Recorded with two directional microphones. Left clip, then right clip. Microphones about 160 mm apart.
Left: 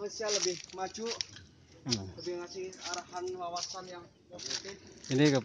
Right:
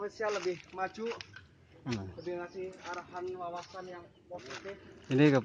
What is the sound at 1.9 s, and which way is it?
Speech, 5° left (ahead or behind).